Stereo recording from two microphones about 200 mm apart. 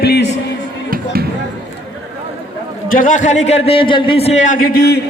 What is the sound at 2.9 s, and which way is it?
A man's voice, 40° left (ahead or behind).